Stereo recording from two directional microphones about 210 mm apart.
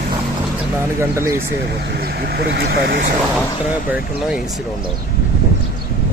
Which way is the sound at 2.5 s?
55° right (ahead or behind).